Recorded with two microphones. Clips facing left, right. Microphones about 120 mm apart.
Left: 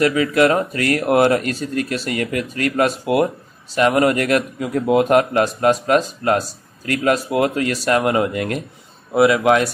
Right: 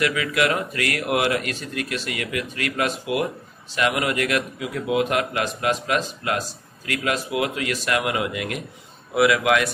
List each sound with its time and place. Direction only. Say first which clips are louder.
0.0 s speech: left 7 dB; 35° left (ahead or behind)
9.1 s speech: left 5 dB; 30° left (ahead or behind)